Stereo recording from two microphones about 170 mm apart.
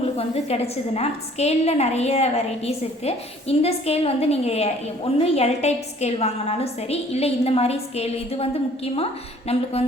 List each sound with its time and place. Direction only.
0.0 s a woman's voice: 35° left (ahead or behind)